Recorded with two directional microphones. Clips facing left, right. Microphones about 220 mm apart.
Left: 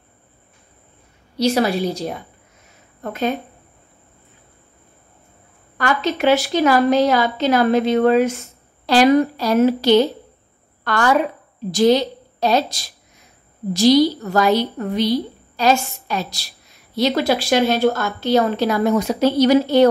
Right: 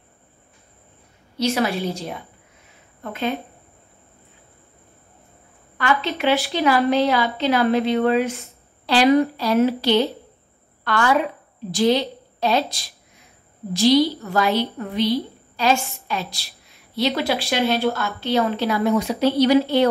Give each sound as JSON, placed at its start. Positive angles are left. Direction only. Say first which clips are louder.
{"t": 1.4, "sound": "a woman's voice", "louder": "left 4 dB", "side_deg": 40}
{"t": 5.8, "sound": "a woman's voice", "louder": "left 2 dB", "side_deg": 45}